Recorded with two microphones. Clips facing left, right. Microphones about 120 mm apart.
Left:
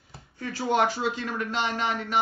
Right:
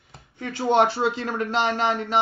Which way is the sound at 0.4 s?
25° right (ahead or behind).